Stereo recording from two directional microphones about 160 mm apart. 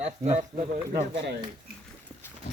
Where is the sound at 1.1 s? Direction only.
90° right.